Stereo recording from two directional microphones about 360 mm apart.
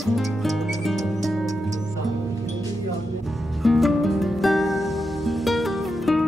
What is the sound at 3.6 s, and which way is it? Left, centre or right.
Music, centre.